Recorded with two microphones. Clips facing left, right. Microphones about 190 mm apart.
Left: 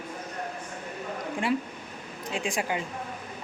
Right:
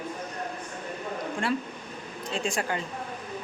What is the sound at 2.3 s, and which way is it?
Speech, 15° left (ahead or behind).